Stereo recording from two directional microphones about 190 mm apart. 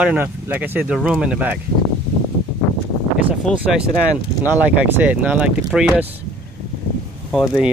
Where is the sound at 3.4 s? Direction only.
Centre (ahead or behind).